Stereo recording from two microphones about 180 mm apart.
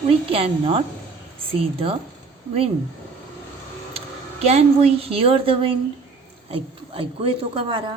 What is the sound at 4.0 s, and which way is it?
A woman's voice, 35° right (ahead or behind).